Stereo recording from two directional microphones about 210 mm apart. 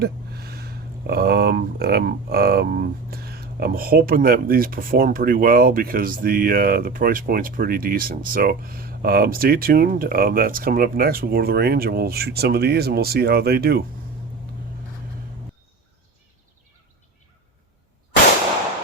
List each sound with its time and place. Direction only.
0.0 s speech: 50° right (ahead or behind)